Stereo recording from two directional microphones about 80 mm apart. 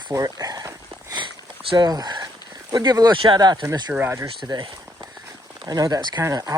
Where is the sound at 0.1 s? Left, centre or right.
Right.